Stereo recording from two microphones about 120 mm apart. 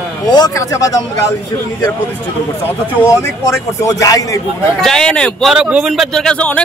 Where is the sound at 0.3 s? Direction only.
30° left (ahead or behind).